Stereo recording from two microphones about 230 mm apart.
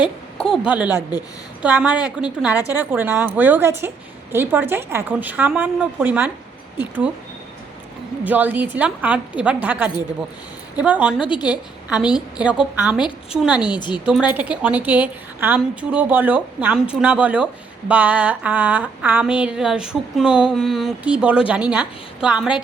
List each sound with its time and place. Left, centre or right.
0.5 s a woman's voice: centre
8.2 s a woman's voice: centre
11.3 s a woman's voice: centre
11.9 s a woman's voice: centre
13.6 s a woman's voice: centre
14.0 s a woman's voice: centre